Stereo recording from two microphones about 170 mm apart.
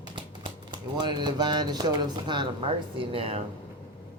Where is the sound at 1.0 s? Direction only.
25° right (ahead or behind).